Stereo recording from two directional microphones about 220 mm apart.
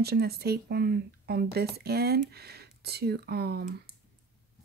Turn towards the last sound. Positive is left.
turn(degrees=-45)  # may be behind; listen again after turning